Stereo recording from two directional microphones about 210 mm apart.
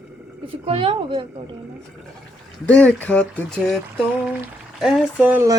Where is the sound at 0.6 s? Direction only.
25° right (ahead or behind).